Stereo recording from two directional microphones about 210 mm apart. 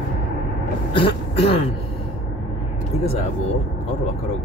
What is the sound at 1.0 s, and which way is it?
Throat clearing, 25° left (ahead or behind).